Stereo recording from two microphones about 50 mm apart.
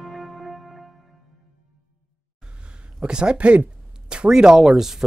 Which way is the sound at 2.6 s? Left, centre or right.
Centre.